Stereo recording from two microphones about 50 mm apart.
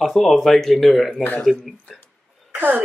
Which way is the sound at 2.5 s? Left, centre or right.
Right.